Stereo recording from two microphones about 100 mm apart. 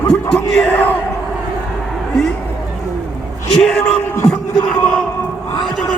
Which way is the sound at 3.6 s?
10° left (ahead or behind).